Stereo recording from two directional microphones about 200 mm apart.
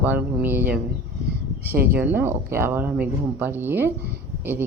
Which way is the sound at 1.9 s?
10° right (ahead or behind).